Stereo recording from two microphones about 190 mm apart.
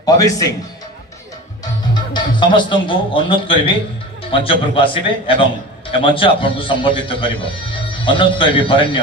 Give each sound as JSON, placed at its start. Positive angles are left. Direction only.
{"t": 0.0, "sound": "a man's voice", "side_deg": 20}
{"t": 1.6, "sound": "a man's voice", "side_deg": 25}